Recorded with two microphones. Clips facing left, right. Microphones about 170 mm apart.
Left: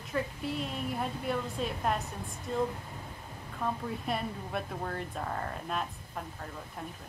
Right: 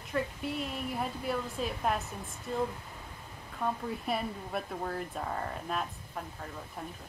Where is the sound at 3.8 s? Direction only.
Centre (ahead or behind).